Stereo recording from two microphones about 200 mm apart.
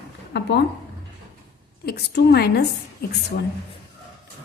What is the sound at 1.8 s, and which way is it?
A woman's voice, 50° left (ahead or behind).